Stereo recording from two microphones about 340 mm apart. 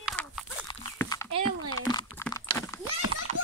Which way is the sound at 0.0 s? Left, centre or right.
Centre.